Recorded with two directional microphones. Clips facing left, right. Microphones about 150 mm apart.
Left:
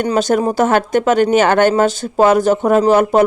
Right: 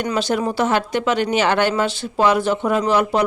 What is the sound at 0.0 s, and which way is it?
Speech, 45° left (ahead or behind).